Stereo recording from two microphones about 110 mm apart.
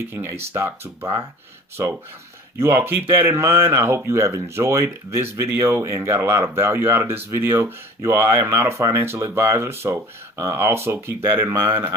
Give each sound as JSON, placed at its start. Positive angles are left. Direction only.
{"t": 0.0, "sound": "speech", "side_deg": -25}
{"t": 2.6, "sound": "speech", "side_deg": -20}